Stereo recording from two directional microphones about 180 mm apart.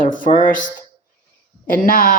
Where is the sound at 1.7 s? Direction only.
50° left (ahead or behind).